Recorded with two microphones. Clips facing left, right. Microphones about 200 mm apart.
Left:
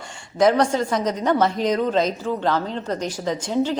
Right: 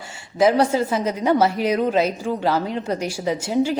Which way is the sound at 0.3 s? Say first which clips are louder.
Right 1 dB; 5° right (ahead or behind).